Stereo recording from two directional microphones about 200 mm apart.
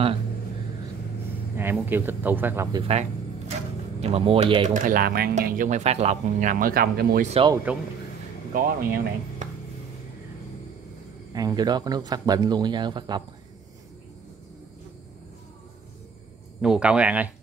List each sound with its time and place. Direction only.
1.6 s speech: 10° right (ahead or behind)
2.9 s a sound: 35° right (ahead or behind)
4.0 s speech: 30° right (ahead or behind)
4.6 s speech: 40° right (ahead or behind)
7.2 s speech: 30° right (ahead or behind)
8.5 s speech: 45° right (ahead or behind)
11.3 s speech: 20° right (ahead or behind)
16.6 s speech: 5° right (ahead or behind)